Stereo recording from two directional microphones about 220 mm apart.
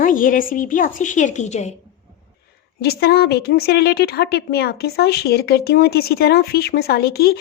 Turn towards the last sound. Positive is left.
turn(degrees=45)  # may be behind; listen again after turning